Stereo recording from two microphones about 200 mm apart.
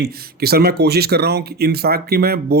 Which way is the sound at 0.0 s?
50° right (ahead or behind).